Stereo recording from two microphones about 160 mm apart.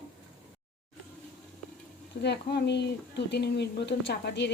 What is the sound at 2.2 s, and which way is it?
Speech, 90° left.